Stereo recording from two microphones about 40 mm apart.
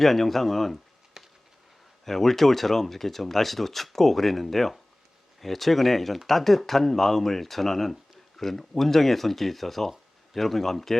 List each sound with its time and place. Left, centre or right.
0.0 s speech: centre
1.2 s a sound: centre
2.0 s speech: centre